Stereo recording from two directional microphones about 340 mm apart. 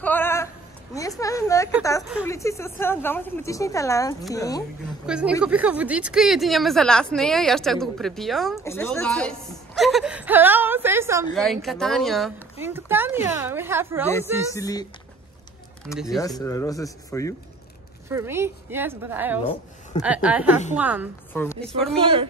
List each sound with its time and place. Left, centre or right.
0.0 s a sound: centre
0.9 s speech: centre
5.0 s speech: centre
14.5 s speech: centre
18.0 s speech: centre
21.3 s a sound: centre
21.9 s speech: centre